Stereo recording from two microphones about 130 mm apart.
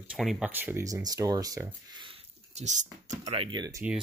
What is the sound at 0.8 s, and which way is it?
Speech, 30° right (ahead or behind).